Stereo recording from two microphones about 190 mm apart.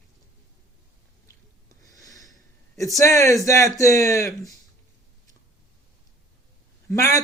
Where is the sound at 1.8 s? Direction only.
20° left (ahead or behind).